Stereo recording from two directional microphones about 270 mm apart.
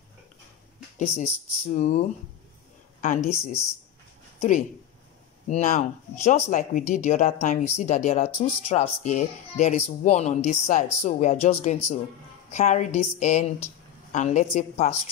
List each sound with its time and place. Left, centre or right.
0.9 s speech: left